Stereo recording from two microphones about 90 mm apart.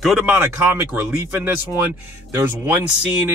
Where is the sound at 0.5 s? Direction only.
25° right (ahead or behind).